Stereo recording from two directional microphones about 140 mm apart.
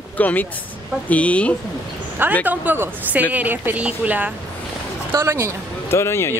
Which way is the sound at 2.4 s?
10° right (ahead or behind).